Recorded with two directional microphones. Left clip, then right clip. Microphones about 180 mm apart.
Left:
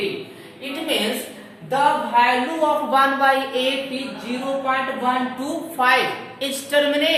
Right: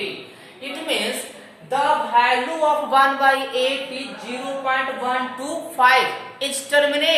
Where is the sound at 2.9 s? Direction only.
20° right (ahead or behind).